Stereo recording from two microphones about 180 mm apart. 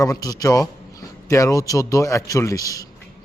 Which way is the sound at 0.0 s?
20° left (ahead or behind).